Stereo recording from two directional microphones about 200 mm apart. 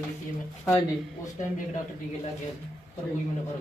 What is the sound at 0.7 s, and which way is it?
Speech, 10° left (ahead or behind).